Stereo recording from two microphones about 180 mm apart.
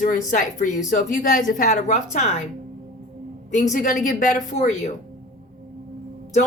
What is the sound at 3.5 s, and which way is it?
Speech, 45° left (ahead or behind).